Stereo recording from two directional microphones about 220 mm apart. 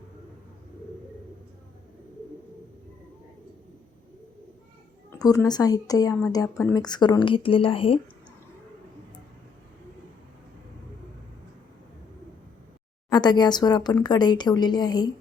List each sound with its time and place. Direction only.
5.1 s speech: 15° left (ahead or behind)
13.1 s speech: 20° left (ahead or behind)